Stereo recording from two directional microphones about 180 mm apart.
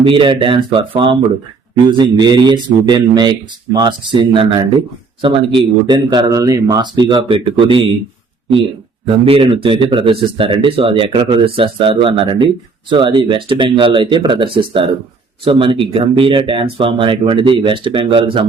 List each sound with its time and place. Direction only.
0.0 s speech: 30° right (ahead or behind)
9.0 s speech: 30° right (ahead or behind)